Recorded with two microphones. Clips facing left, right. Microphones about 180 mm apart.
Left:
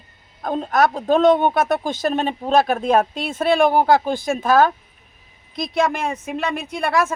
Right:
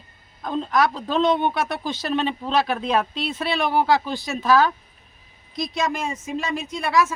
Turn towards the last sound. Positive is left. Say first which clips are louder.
# left 1 dB
turn(degrees=55)  # may be behind; listen again after turning